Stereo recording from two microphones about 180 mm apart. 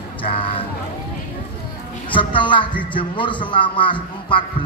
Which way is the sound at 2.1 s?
25° left (ahead or behind).